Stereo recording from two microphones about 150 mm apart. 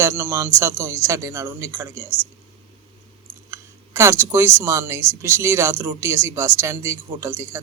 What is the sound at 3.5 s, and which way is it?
Speech, 20° right (ahead or behind).